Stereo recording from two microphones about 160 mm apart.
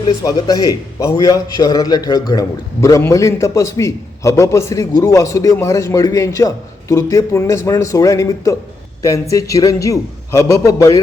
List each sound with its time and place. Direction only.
0.2 s a man's voice: 20° left (ahead or behind)